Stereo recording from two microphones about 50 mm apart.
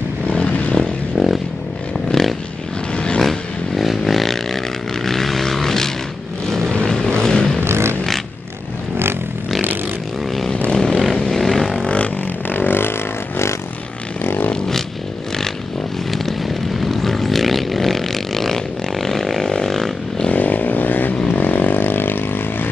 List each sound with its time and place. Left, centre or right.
0.3 s vehicle: left
1.1 s a sound: centre
5.0 s vehicle: centre
7.6 s a sound: right
10.7 s vehicle: centre
12.4 s vehicle: left
14.2 s a sound: left
16.8 s vehicle: centre
20.2 s vehicle: left